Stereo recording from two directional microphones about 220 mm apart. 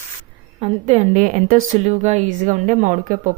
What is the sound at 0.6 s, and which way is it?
A woman's voice, 30° right (ahead or behind).